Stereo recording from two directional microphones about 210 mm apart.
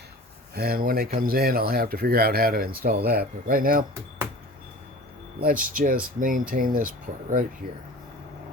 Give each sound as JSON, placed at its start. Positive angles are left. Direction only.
{"t": 0.5, "sound": "speech", "side_deg": -45}
{"t": 5.4, "sound": "speech", "side_deg": -40}